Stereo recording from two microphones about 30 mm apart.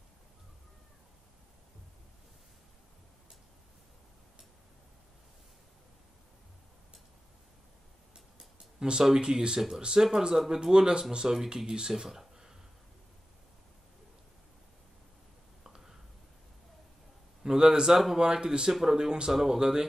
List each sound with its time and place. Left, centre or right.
8.8 s speech: right
15.7 s whispering: centre
17.4 s speech: right
18.7 s speech: centre
18.9 s speech: right
19.3 s speech: centre